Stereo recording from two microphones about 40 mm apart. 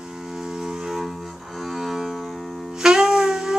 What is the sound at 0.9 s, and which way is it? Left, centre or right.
Cello, centre.